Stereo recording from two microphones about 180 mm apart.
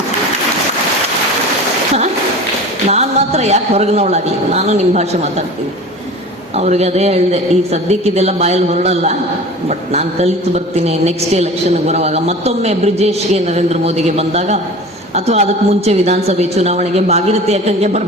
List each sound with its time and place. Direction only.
2.8 s a woman's voice: 35° right (ahead or behind)
6.6 s a woman's voice: 35° right (ahead or behind)